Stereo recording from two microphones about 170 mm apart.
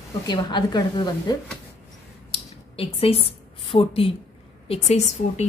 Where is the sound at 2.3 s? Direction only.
35° left (ahead or behind).